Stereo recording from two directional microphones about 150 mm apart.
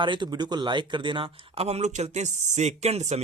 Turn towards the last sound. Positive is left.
turn(degrees=-45)  # may be behind; listen again after turning